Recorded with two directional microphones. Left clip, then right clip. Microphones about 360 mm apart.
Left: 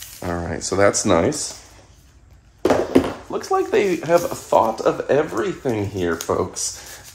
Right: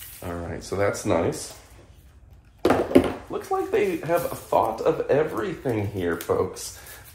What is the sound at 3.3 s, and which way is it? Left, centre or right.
Speech, left.